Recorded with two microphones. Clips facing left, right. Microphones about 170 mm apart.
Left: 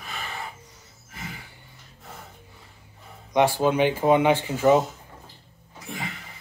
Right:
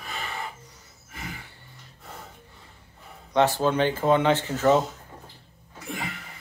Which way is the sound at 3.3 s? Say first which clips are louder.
Left 1 dB; 10° left (ahead or behind).